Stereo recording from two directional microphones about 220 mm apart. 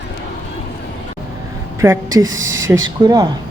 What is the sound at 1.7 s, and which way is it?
A woman's voice, 10° right (ahead or behind).